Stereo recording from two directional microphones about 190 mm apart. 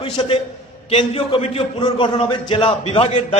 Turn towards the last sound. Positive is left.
turn(degrees=30)  # may be behind; listen again after turning